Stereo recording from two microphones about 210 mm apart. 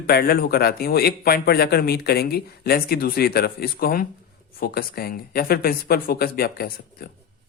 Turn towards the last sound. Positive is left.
turn(degrees=45)  # may be behind; listen again after turning